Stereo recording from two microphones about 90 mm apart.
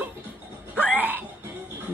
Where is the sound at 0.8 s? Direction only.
15° right (ahead or behind).